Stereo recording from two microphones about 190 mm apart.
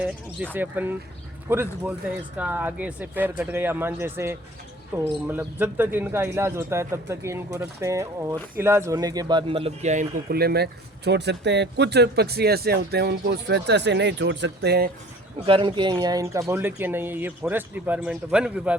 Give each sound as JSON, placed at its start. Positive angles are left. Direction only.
{"t": 0.5, "sound": "speech", "side_deg": -10}
{"t": 10.3, "sound": "speech", "side_deg": -55}
{"t": 15.4, "sound": "speech", "side_deg": -25}